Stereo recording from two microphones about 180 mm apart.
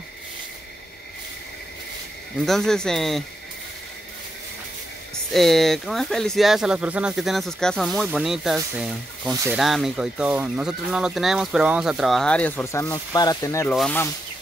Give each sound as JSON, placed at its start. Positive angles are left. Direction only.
{"t": 2.4, "sound": "speech", "side_deg": 0}
{"t": 5.3, "sound": "speech", "side_deg": 0}
{"t": 9.3, "sound": "speech", "side_deg": -15}
{"t": 9.6, "sound": "speech", "side_deg": 0}